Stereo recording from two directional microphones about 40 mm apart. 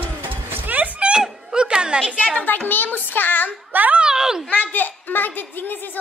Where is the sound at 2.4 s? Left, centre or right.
Left.